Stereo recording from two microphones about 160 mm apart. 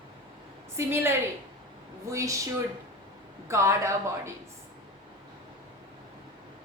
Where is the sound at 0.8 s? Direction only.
15° right (ahead or behind).